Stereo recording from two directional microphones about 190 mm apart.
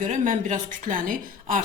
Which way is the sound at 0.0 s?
40° right (ahead or behind).